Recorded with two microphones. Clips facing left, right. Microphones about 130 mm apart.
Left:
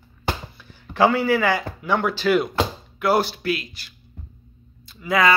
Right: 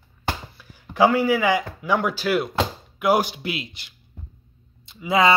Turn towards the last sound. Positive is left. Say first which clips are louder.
# right 1 dB
turn(degrees=-25)  # may be behind; listen again after turning